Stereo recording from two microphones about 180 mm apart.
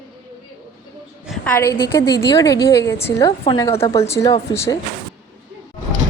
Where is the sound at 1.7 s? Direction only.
65° left (ahead or behind).